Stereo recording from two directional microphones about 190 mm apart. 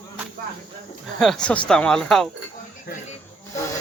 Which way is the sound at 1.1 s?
Centre (ahead or behind).